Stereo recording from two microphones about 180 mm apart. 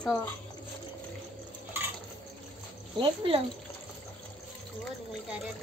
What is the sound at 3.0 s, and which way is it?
Speech, 30° right (ahead or behind).